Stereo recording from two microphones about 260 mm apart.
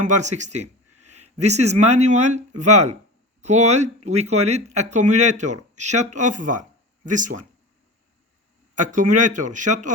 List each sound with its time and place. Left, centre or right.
0.0 s speech: right
8.7 s speech: right